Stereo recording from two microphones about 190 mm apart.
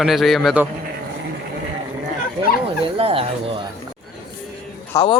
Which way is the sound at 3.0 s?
30° right (ahead or behind).